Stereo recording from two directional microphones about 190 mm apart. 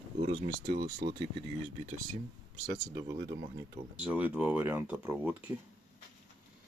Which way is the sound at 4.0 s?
5° right (ahead or behind).